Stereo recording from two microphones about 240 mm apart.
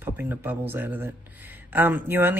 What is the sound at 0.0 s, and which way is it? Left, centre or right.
A man's voice, centre.